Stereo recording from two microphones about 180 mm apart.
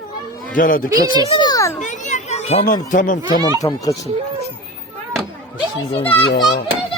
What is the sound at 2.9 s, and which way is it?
Speech, 45° left (ahead or behind).